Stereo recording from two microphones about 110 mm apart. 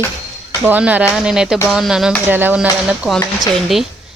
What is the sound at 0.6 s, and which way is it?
A woman's voice, 15° right (ahead or behind).